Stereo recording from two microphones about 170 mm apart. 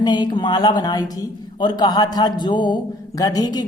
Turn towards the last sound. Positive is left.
turn(degrees=20)  # may be behind; listen again after turning